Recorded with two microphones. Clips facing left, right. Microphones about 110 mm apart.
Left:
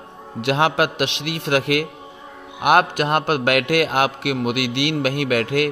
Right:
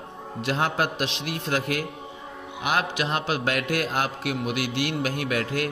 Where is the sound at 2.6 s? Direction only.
60° left (ahead or behind).